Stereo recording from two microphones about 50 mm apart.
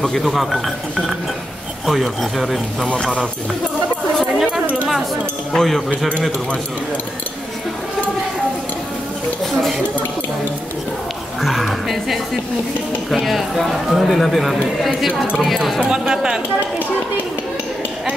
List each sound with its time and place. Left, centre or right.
0.0 s speech: centre
1.9 s speech: centre
5.5 s speech: centre
5.9 s speech: left
9.4 s speech: centre
11.4 s speech: centre
15.9 s speech: centre